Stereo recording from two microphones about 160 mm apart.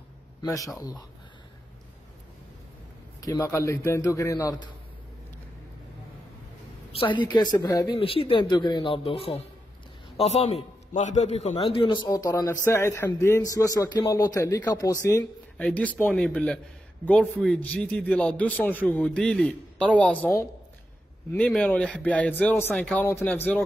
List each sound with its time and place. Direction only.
0.7 s a man's voice: 25° left (ahead or behind)
3.2 s a man's voice: 25° left (ahead or behind)
6.9 s a man's voice: 35° left (ahead or behind)
8.0 s a man's voice: 35° left (ahead or behind); by 15.2 s 20° left (ahead or behind)
15.5 s speech: 10° left (ahead or behind)
17.5 s speech: 10° left (ahead or behind)